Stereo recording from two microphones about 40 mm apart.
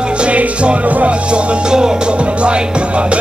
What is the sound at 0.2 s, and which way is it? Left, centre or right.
Music, right.